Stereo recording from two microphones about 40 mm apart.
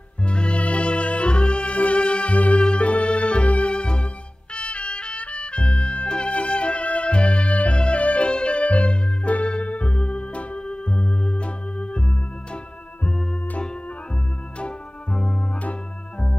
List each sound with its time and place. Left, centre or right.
0.2 s music: left
14.6 s organ: left